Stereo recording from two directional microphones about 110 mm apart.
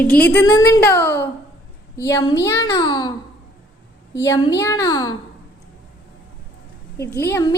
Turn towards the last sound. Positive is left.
turn(degrees=20)  # may be behind; listen again after turning